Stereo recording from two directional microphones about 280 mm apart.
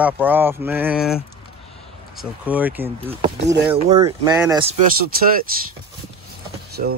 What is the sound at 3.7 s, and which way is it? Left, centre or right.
Speech, right.